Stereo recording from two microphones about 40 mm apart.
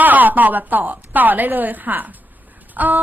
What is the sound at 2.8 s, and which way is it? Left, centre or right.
Speech, right.